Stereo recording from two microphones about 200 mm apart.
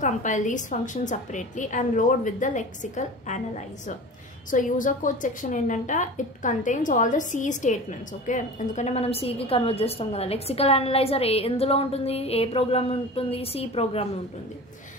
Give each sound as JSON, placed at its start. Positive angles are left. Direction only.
{"t": 0.0, "sound": "a woman's voice", "side_deg": 40}
{"t": 4.5, "sound": "a woman's voice", "side_deg": 40}